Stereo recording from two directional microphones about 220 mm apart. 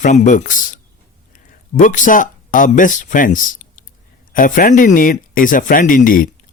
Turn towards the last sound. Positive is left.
turn(degrees=40)  # may be behind; listen again after turning